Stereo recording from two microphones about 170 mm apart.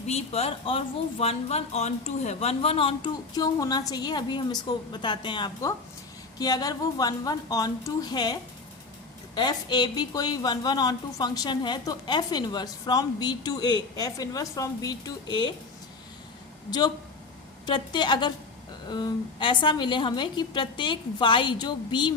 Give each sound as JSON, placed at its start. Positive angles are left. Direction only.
{"t": 0.1, "sound": "a woman's voice", "side_deg": 35}
{"t": 17.7, "sound": "a woman's voice", "side_deg": 25}